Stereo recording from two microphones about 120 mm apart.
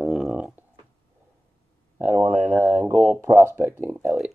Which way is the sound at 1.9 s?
20° right (ahead or behind).